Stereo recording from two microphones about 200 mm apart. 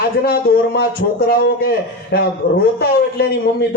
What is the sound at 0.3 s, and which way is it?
A man's voice, 50° left (ahead or behind).